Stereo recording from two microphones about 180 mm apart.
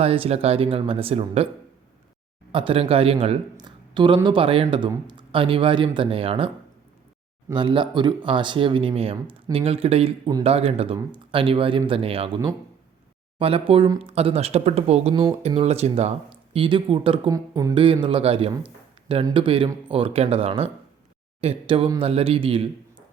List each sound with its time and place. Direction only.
0.0 s speech: 35° right (ahead or behind)
2.5 s speech: 30° right (ahead or behind)
15.1 s speech: 25° right (ahead or behind)
15.4 s speech: 35° right (ahead or behind)